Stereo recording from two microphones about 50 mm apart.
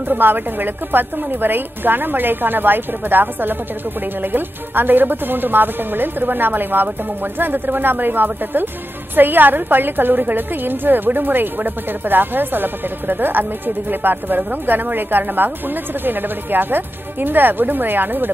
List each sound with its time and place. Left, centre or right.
0.1 s a woman's voice: right